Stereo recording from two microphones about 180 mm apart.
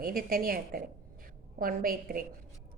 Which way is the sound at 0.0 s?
55° right (ahead or behind).